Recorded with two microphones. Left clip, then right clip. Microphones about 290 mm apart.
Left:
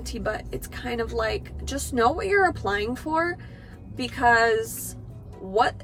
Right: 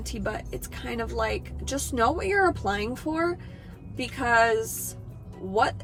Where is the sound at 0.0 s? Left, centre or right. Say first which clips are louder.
Left 3 dB; centre.